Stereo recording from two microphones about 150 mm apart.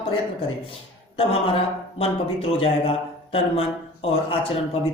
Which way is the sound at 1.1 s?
40° left (ahead or behind).